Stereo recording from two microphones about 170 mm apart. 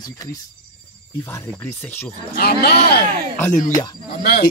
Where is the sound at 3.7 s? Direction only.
20° left (ahead or behind).